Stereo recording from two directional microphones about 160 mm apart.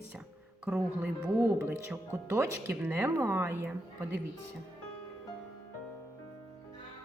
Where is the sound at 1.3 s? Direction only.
10° right (ahead or behind).